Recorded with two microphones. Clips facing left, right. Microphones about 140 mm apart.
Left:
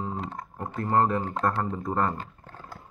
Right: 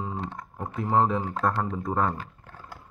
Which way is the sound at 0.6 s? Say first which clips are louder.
Even; centre (ahead or behind).